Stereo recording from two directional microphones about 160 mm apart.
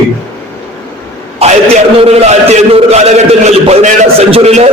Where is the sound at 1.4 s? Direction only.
40° right (ahead or behind).